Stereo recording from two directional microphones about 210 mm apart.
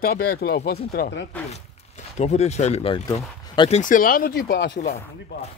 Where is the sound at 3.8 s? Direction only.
40° left (ahead or behind).